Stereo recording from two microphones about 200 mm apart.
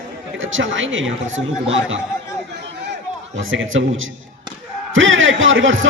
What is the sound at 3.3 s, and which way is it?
A man's voice, 75° right (ahead or behind).